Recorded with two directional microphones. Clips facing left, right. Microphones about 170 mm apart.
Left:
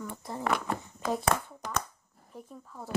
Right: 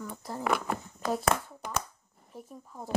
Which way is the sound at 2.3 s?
15° right (ahead or behind).